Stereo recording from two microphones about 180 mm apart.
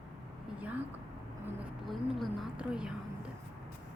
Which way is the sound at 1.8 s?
Centre (ahead or behind).